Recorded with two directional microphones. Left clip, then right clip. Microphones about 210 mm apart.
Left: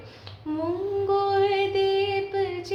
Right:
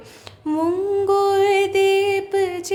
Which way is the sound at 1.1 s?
55° right (ahead or behind).